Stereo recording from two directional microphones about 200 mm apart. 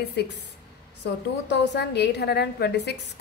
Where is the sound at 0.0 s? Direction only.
55° left (ahead or behind).